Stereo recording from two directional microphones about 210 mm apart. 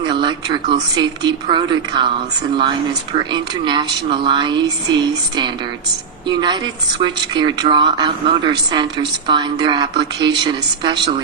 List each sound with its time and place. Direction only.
0.0 s speech: 20° right (ahead or behind)
3.2 s speech: 20° right (ahead or behind)